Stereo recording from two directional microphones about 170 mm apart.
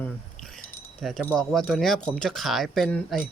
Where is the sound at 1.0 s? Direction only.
5° left (ahead or behind).